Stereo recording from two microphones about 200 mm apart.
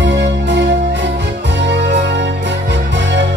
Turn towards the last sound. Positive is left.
turn(degrees=-60)  # may be behind; listen again after turning